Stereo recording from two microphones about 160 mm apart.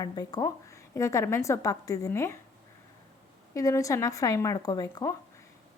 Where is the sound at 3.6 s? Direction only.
20° left (ahead or behind).